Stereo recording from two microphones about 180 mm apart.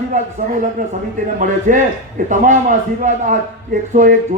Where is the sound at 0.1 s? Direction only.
40° right (ahead or behind).